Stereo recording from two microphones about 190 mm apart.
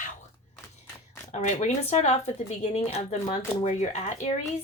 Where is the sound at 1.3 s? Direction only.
35° left (ahead or behind).